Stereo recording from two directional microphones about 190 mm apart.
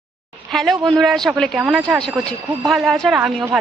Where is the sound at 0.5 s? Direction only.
Centre (ahead or behind).